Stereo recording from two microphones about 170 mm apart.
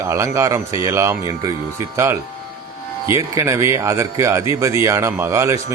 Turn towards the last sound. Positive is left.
turn(degrees=-15)  # may be behind; listen again after turning